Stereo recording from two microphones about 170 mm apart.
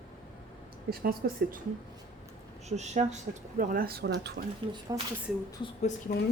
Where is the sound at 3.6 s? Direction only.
60° right (ahead or behind).